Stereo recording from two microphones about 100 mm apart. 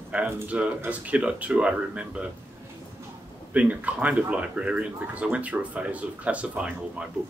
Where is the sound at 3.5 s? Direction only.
15° right (ahead or behind).